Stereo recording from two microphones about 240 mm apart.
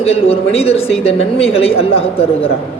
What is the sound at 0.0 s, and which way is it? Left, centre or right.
Speech, left.